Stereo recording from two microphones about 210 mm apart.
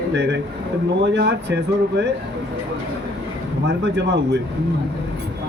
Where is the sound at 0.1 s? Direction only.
55° right (ahead or behind).